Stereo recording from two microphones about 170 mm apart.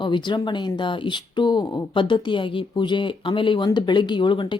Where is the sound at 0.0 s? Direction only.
25° left (ahead or behind).